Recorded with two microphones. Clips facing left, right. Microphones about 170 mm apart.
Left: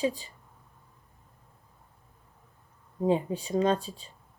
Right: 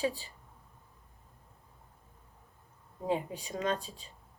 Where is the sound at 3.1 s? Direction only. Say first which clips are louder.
Left 6 dB; 30° left (ahead or behind).